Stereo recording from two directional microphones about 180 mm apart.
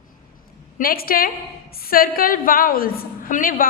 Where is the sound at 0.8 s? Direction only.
55° left (ahead or behind).